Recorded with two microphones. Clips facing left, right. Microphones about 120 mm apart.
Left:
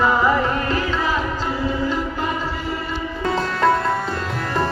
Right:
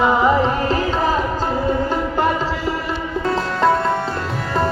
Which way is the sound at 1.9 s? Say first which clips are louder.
Right 5 dB; 60° right (ahead or behind).